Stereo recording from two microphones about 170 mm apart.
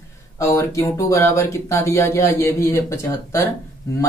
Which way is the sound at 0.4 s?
15° left (ahead or behind).